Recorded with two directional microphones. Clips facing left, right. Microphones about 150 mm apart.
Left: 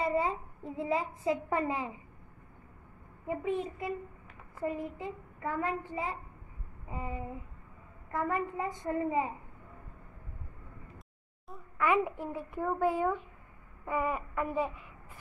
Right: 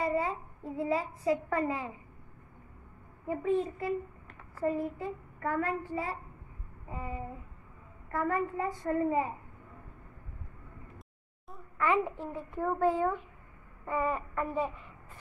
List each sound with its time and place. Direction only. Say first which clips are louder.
0.0 s a child's voice: even; 25° left (ahead or behind)
3.3 s a child's voice: right 3 dB; 20° left (ahead or behind)
8.1 s a child's voice: right 2 dB; 20° left (ahead or behind)
11.8 s a child's voice: even; 15° left (ahead or behind)